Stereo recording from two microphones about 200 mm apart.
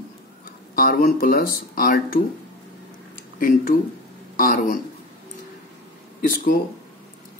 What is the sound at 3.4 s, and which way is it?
Speech, 45° left (ahead or behind).